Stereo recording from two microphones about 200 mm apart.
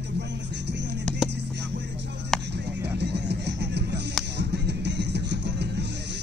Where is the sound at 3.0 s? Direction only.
55° right (ahead or behind).